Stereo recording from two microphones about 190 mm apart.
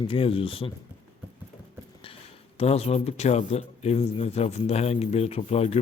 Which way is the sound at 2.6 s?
35° left (ahead or behind).